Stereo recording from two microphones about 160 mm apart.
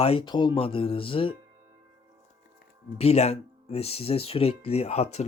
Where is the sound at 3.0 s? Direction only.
40° left (ahead or behind).